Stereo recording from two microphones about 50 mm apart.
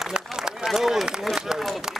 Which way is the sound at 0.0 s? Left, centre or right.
Centre.